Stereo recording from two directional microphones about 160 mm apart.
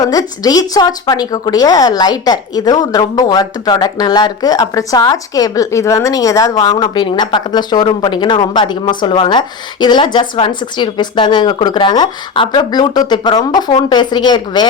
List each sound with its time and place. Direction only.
0.0 s a woman's voice: 20° left (ahead or behind)